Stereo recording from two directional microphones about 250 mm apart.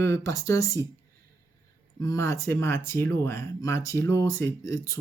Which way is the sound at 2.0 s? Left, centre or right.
Centre.